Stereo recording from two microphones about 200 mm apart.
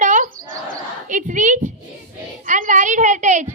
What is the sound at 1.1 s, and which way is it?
Speech, 40° right (ahead or behind).